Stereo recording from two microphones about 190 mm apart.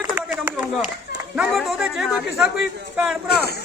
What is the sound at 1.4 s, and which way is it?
Speech, centre (ahead or behind).